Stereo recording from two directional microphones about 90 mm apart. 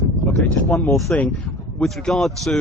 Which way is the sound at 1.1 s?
15° left (ahead or behind).